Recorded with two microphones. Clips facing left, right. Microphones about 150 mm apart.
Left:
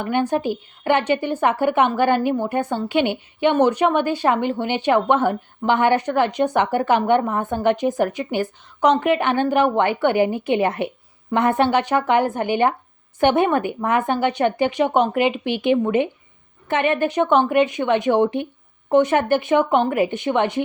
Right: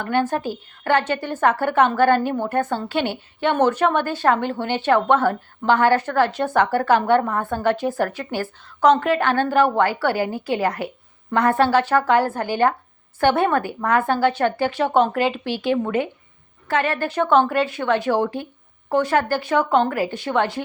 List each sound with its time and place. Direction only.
0.0 s a woman's voice: 15° left (ahead or behind)